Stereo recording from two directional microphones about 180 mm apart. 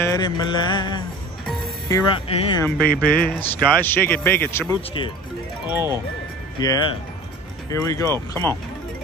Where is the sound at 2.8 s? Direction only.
60° left (ahead or behind).